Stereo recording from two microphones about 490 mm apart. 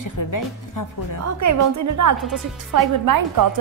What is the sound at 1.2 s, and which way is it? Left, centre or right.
A woman's voice, right.